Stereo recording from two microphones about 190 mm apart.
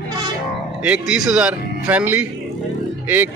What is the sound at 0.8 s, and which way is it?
A man's voice, 5° right (ahead or behind).